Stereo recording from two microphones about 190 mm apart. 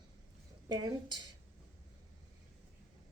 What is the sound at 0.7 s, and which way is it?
Speech, 25° right (ahead or behind).